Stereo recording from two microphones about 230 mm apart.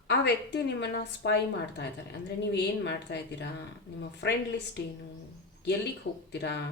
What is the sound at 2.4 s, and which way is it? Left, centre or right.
Speech, left.